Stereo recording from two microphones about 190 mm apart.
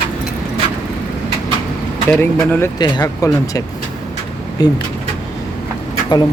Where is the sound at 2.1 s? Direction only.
10° left (ahead or behind).